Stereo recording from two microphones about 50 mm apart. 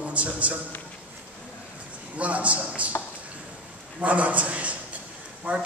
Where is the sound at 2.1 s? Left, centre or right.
Right.